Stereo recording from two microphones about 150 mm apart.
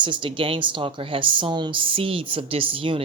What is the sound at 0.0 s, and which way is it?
A woman's voice, 35° right (ahead or behind).